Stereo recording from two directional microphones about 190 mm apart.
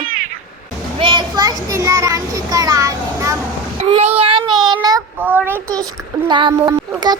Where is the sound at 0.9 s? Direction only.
25° right (ahead or behind).